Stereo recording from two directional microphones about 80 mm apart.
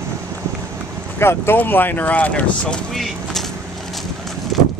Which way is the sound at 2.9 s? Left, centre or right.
Centre.